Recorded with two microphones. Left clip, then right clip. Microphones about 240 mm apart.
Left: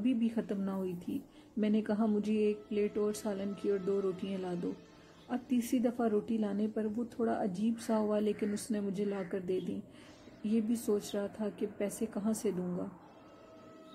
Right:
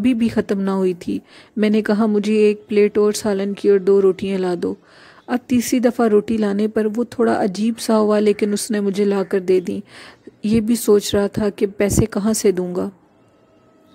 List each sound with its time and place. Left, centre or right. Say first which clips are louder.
0.0 s a woman's voice: right 15 dB; right